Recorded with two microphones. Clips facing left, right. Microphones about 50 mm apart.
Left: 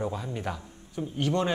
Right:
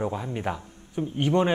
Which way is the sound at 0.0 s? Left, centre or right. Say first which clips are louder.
Right 3 dB; centre.